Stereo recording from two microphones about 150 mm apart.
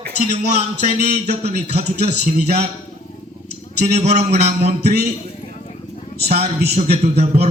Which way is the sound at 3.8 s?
50° right (ahead or behind).